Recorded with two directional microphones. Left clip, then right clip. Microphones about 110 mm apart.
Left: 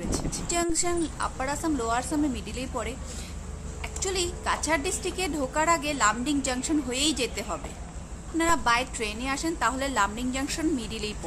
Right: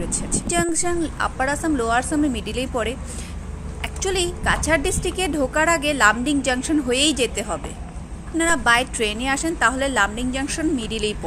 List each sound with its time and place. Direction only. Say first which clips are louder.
0.5 s a woman's voice: right 5 dB; 40° right (ahead or behind)